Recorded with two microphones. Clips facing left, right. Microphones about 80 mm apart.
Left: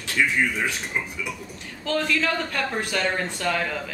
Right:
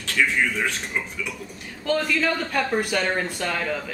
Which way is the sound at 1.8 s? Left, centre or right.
Centre.